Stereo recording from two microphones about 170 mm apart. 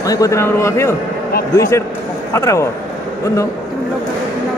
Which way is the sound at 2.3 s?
15° left (ahead or behind).